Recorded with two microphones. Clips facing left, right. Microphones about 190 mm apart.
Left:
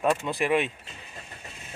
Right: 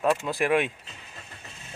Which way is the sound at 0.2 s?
Centre (ahead or behind).